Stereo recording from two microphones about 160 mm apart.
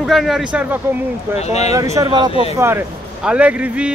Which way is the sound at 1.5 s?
45° left (ahead or behind).